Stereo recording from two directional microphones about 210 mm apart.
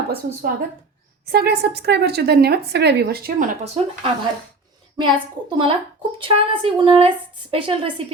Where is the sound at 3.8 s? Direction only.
30° right (ahead or behind).